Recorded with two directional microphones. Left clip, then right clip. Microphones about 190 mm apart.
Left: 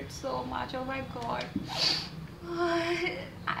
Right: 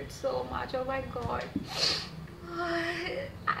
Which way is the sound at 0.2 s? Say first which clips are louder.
Right 1 dB; 5° right (ahead or behind).